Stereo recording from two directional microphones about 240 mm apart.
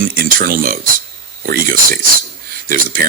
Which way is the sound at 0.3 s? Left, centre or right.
Right.